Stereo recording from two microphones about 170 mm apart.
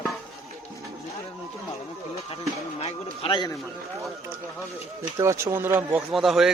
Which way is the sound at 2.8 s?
30° left (ahead or behind).